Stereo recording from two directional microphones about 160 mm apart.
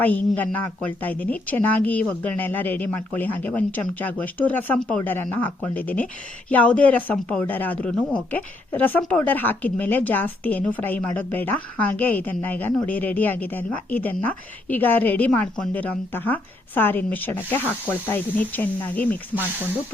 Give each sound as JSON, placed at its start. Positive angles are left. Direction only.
{"t": 0.0, "sound": "speech", "side_deg": 10}